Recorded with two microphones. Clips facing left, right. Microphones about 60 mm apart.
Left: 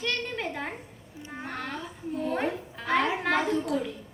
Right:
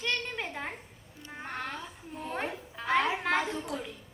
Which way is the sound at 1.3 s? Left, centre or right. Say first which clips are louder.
Left 2 dB; centre.